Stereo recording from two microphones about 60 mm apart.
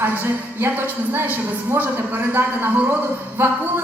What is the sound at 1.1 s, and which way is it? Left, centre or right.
Speech, right.